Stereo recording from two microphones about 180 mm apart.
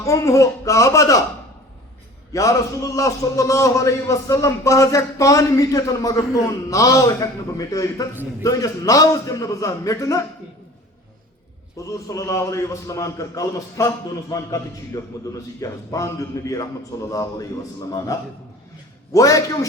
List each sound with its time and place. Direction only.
0.0 s a man's voice: 15° left (ahead or behind)
2.3 s a man's voice: 20° left (ahead or behind)
8.1 s a man's voice: 10° right (ahead or behind)
8.4 s a man's voice: 20° left (ahead or behind)
11.9 s a man's voice: 20° left (ahead or behind)
19.1 s a man's voice: 20° left (ahead or behind)